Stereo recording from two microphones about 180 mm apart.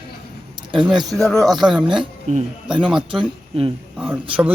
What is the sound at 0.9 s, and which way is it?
Speech, 20° right (ahead or behind).